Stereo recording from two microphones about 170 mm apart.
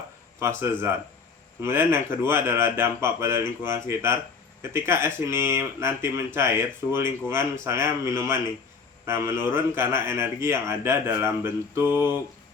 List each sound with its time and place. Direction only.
0.3 s speech: 15° right (ahead or behind)